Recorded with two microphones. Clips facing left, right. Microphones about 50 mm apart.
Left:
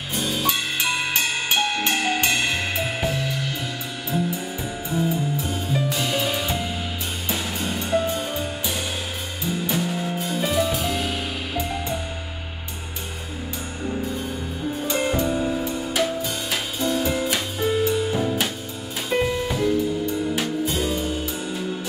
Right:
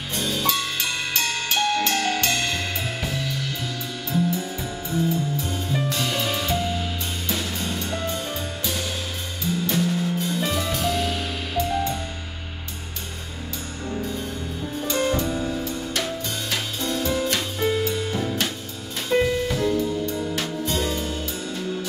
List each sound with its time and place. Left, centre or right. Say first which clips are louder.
0.1 s music: left 1 dB; centre
0.5 s music: left 2 dB; centre
4.9 s music: even; centre
13.8 s music: left 2 dB; centre